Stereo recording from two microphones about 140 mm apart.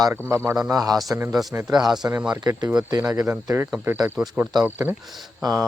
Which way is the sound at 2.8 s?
25° right (ahead or behind).